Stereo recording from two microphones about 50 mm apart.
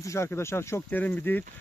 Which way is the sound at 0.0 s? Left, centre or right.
Left.